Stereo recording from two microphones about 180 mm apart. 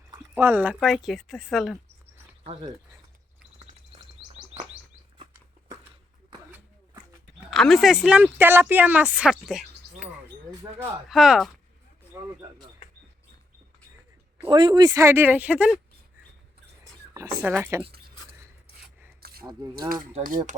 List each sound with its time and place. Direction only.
0.3 s speech: 10° right (ahead or behind)
2.4 s speech: 30° right (ahead or behind)
7.5 s speech: centre (ahead or behind)
14.4 s speech: 25° right (ahead or behind); by 15.8 s 5° right (ahead or behind)
16.8 s speech: 15° right (ahead or behind)
17.8 s a sound: 60° right (ahead or behind)
20.2 s speech: 50° right (ahead or behind)